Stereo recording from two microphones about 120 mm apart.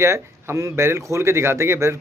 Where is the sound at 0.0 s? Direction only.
20° right (ahead or behind).